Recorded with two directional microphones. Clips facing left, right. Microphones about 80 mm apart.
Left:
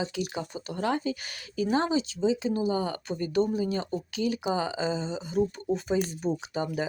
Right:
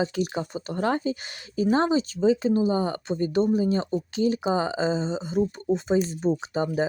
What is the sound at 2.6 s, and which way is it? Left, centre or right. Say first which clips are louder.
Speech: right 4 dB; right.